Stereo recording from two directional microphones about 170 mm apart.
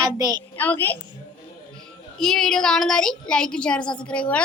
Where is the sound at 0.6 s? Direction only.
10° left (ahead or behind).